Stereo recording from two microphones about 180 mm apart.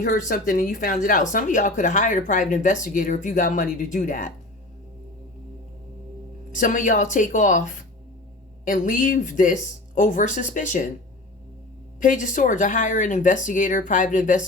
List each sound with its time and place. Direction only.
0.0 s speech: 45° left (ahead or behind)
6.5 s speech: 45° left (ahead or behind)
11.9 s speech: 45° left (ahead or behind)